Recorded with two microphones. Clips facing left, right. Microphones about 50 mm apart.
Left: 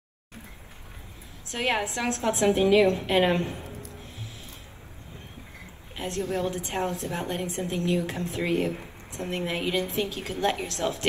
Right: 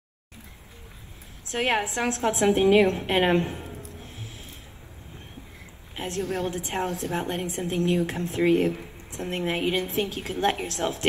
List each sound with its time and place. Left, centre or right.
1.5 s a woman's voice: right
5.9 s a woman's voice: right